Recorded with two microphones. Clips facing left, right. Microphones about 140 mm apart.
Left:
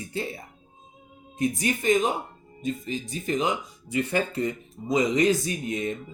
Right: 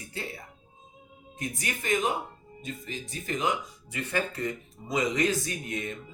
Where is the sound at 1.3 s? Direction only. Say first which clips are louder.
Left 9 dB; 20° left (ahead or behind).